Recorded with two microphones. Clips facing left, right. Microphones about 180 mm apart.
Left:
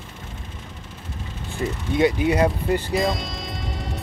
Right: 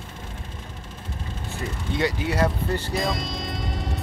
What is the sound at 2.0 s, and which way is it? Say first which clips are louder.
Speech: left 5 dB; 20° left (ahead or behind).